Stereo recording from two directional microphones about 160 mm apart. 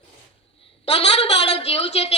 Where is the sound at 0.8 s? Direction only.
40° left (ahead or behind).